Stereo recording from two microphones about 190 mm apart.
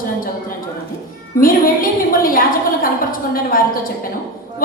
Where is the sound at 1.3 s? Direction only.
50° left (ahead or behind).